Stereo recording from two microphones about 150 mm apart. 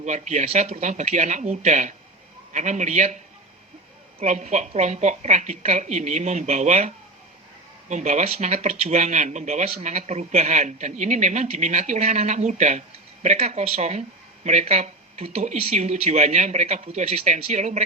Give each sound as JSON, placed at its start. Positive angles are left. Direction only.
{"t": 0.0, "sound": "speech", "side_deg": -50}
{"t": 4.2, "sound": "speech", "side_deg": -50}